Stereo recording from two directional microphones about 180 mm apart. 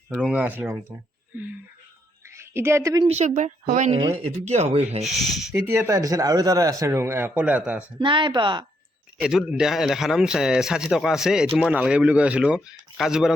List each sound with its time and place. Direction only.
0.1 s a man's voice: 5° right (ahead or behind)
1.3 s wail: 10° right (ahead or behind)
2.3 s speech: 15° right (ahead or behind)
3.1 s speech: 40° right (ahead or behind)
5.0 s a man's voice: centre (ahead or behind)
5.5 s a man's voice: 15° right (ahead or behind)
7.9 s speech: 25° right (ahead or behind)
9.2 s a man's voice: 5° right (ahead or behind)